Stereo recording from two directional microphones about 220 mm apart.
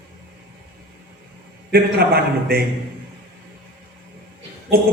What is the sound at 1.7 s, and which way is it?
Speech, 45° right (ahead or behind).